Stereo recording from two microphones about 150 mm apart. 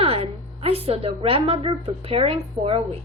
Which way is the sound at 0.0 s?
40° right (ahead or behind).